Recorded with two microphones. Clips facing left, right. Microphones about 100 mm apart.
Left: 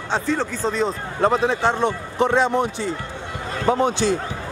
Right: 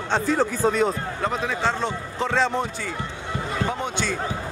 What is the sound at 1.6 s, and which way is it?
Speech, 15° left (ahead or behind).